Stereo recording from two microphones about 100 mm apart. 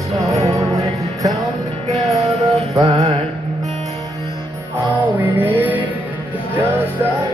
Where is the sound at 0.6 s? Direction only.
35° right (ahead or behind).